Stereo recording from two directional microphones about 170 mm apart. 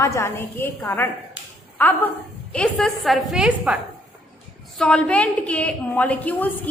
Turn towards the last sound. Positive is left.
turn(degrees=10)  # may be behind; listen again after turning